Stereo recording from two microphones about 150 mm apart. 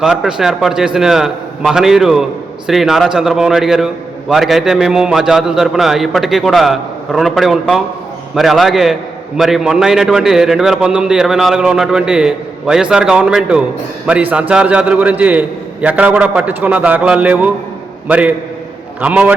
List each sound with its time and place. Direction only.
0.0 s a man's voice: 5° right (ahead or behind)